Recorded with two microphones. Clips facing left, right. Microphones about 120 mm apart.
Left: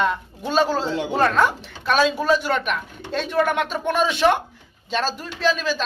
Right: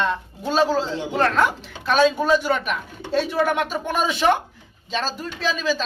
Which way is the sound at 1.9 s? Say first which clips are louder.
Right 1 dB; 5° left (ahead or behind).